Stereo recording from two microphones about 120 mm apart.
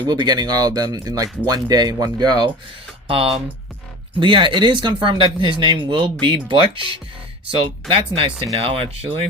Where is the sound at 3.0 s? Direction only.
50° right (ahead or behind).